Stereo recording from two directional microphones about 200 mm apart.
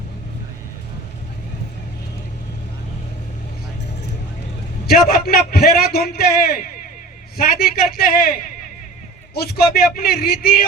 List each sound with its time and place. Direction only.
4.9 s a man's voice: 50° left (ahead or behind)
9.3 s a man's voice: 50° left (ahead or behind)